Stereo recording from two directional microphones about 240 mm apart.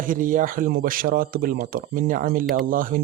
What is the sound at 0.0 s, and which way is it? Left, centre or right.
Speech, right.